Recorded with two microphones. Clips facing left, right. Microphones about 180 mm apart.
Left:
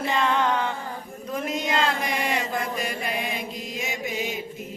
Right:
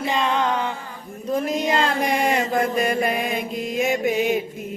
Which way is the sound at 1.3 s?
35° right (ahead or behind).